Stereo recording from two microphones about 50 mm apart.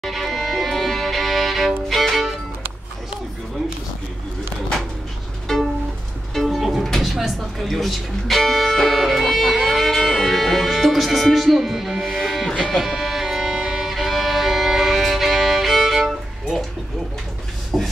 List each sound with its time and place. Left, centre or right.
0.0 s music: centre
6.3 s music: centre
6.9 s speech: centre
12.7 s violin: centre
17.7 s a sound: centre